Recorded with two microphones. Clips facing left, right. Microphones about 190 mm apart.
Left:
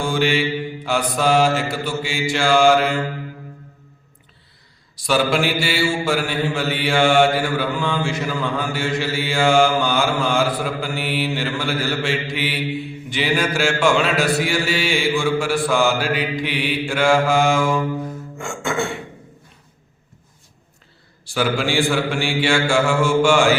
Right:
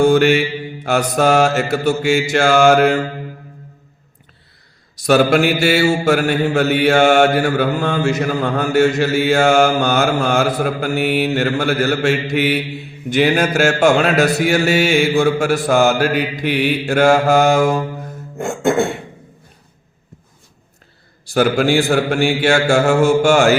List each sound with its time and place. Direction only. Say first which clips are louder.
0.0 s mantra: right 8 dB; 45° right (ahead or behind)
5.0 s mantra: right 6 dB; 45° right (ahead or behind)
18.4 s music: right 8 dB; 55° right (ahead or behind)
21.3 s mantra: right 6 dB; 45° right (ahead or behind)